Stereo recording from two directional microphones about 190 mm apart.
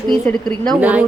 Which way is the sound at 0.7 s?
10° right (ahead or behind).